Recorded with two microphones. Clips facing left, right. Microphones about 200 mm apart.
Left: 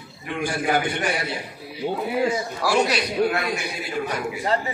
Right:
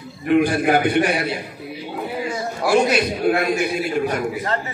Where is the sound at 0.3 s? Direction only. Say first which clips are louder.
Right 8 dB; 60° right (ahead or behind).